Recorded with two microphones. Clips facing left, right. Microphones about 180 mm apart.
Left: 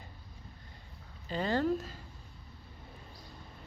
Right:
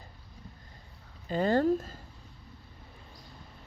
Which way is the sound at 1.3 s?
45° right (ahead or behind).